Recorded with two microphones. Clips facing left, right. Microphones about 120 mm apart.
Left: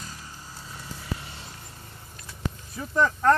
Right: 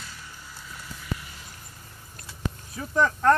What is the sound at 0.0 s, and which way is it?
Vehicle, 40° left (ahead or behind).